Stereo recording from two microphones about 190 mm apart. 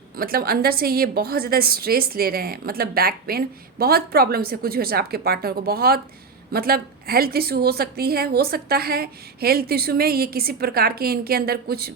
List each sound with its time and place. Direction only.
0.2 s a woman's voice: 50° right (ahead or behind)